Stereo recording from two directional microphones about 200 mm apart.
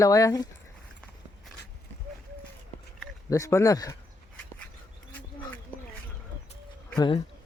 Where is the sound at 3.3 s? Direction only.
15° left (ahead or behind).